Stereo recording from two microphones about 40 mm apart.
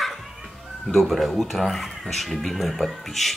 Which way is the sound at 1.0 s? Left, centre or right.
Centre.